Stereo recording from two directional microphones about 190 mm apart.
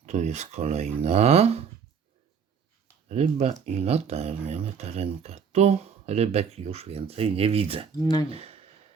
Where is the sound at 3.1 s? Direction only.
35° right (ahead or behind).